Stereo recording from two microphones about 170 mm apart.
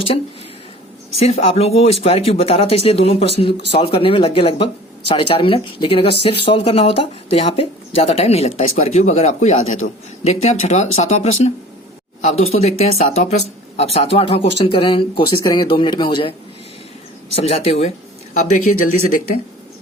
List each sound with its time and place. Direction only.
1.2 s speech: 35° left (ahead or behind)
17.3 s speech: 35° left (ahead or behind)